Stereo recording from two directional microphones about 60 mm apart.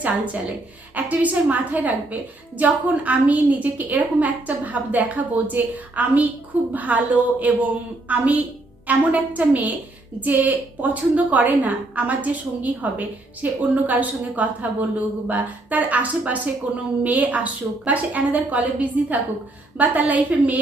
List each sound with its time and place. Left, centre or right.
0.9 s a woman's voice: right